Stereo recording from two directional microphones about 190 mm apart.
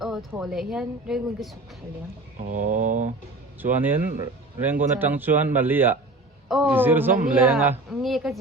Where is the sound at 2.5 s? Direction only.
45° right (ahead or behind).